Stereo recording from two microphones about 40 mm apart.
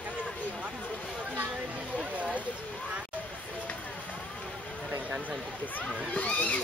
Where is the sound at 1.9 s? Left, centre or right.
Right.